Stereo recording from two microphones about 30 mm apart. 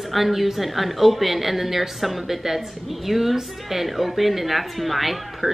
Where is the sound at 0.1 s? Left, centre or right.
Centre.